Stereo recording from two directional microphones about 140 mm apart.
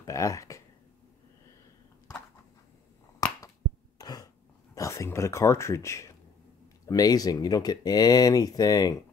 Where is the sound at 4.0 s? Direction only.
25° left (ahead or behind).